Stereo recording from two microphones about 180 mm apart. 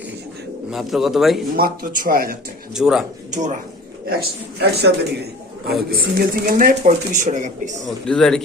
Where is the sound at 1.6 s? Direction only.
50° right (ahead or behind).